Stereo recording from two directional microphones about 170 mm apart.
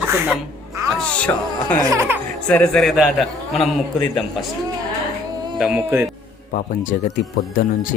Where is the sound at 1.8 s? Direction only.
15° right (ahead or behind).